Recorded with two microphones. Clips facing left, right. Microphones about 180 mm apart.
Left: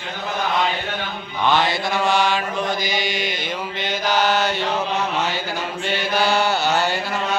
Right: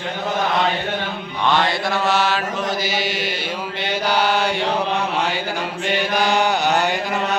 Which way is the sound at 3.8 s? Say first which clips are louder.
Right 1 dB; 10° right (ahead or behind).